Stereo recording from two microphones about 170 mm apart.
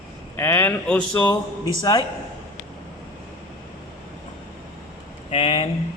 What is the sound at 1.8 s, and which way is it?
Speech, 25° left (ahead or behind).